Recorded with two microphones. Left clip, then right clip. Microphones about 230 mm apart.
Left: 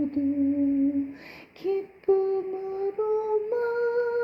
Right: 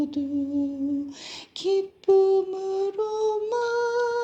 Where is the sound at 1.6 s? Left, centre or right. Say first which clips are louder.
Right 3 dB; right.